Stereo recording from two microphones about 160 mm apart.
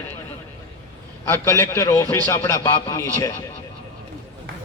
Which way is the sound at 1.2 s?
15° left (ahead or behind).